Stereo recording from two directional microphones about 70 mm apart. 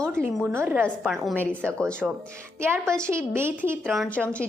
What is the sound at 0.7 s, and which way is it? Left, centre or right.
Speech, right.